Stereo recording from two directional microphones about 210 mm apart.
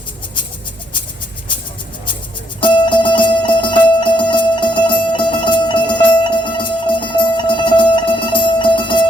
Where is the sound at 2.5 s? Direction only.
20° left (ahead or behind).